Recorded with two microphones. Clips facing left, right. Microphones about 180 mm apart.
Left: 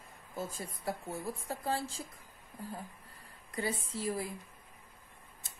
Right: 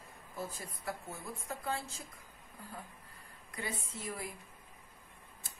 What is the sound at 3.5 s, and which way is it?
Speech, 30° left (ahead or behind).